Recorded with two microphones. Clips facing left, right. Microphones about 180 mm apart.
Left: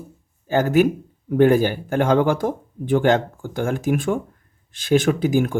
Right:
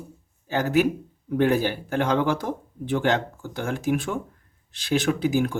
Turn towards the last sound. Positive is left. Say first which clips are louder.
# left 4 dB
turn(degrees=50)  # may be behind; listen again after turning